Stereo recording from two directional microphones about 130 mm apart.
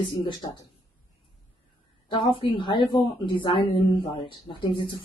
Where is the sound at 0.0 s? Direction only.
40° left (ahead or behind).